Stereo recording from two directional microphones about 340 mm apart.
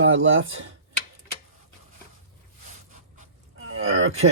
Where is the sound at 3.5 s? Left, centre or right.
Right.